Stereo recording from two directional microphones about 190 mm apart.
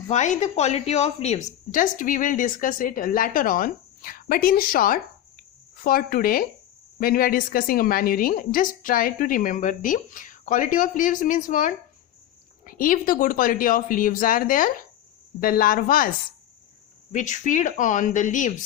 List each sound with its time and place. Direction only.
0.1 s a woman's voice: 40° left (ahead or behind)
17.1 s speech: 40° left (ahead or behind)